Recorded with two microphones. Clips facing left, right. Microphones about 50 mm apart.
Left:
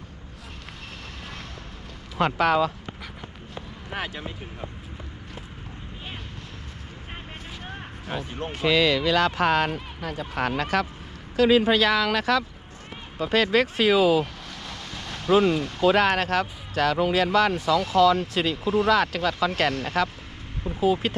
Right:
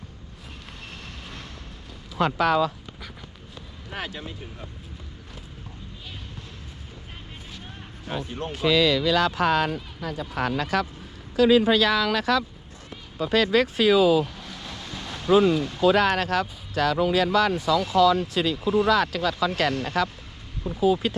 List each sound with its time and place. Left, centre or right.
2.1 s speech: left
3.2 s a sound: left
3.9 s speech: centre
8.0 s speech: centre
8.5 s speech: left
9.7 s speech: left
14.6 s speech: left
20.8 s speech: left